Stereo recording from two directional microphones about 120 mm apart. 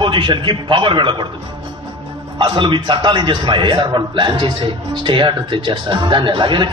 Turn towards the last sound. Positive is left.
turn(degrees=-40)  # may be behind; listen again after turning